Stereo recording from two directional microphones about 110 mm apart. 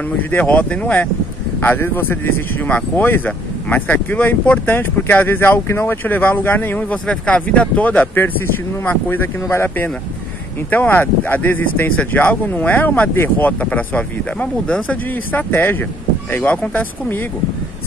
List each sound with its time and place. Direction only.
0.2 s speech: 15° left (ahead or behind)